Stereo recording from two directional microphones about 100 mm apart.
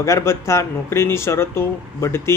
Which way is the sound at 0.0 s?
30° left (ahead or behind).